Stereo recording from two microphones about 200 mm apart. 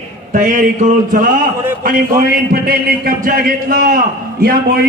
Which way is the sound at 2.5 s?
50° right (ahead or behind).